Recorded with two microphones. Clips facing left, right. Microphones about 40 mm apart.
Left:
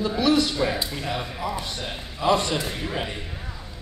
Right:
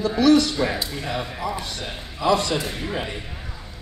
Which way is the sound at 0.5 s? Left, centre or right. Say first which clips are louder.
Right 1 dB; centre.